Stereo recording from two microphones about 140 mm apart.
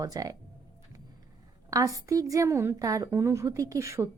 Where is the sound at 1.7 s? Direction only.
25° right (ahead or behind).